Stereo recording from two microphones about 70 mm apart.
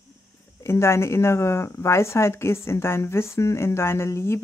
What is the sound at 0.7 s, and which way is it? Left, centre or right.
Speech, left.